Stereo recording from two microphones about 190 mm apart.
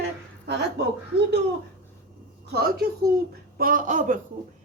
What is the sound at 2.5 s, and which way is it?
A woman's voice, 55° right (ahead or behind).